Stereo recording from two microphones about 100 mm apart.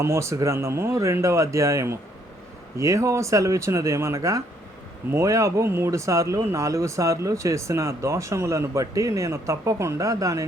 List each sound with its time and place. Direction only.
0.0 s speech: 30° right (ahead or behind)